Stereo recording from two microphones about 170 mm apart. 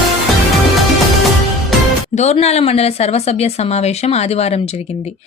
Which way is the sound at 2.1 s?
40° left (ahead or behind).